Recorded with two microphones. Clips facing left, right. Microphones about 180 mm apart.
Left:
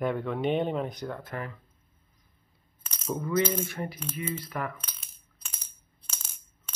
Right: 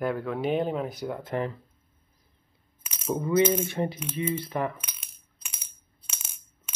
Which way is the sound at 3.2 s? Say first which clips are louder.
Right 5 dB; 25° right (ahead or behind).